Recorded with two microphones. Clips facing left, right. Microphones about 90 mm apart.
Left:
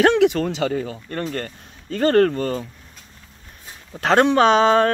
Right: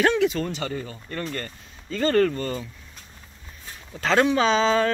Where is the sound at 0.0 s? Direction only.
65° left (ahead or behind); by 0.9 s 90° left.